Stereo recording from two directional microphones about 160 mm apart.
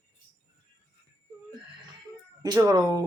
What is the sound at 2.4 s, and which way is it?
Speech, 20° right (ahead or behind).